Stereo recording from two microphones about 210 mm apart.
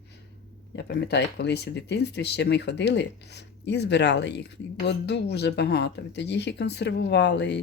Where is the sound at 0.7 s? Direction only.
50° left (ahead or behind).